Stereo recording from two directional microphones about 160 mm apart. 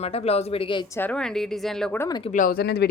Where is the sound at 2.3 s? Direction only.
60° left (ahead or behind); by 2.9 s 90° left.